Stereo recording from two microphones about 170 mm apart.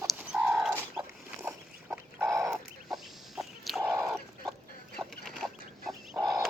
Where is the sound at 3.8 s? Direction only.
20° right (ahead or behind).